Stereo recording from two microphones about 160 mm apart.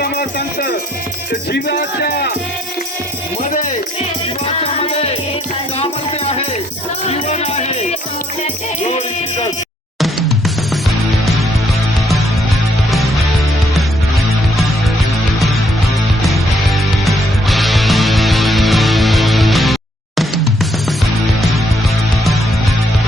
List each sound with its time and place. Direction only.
0.0 s music: 75° left (ahead or behind)
1.5 s speech: 75° left (ahead or behind)
3.4 s music: 50° left (ahead or behind)
4.6 s music: 40° left (ahead or behind)
10.0 s music: centre (ahead or behind)
16.2 s music: centre (ahead or behind)